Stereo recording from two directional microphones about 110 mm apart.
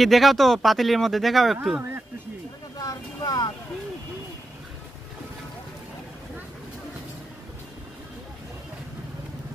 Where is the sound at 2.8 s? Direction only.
35° left (ahead or behind).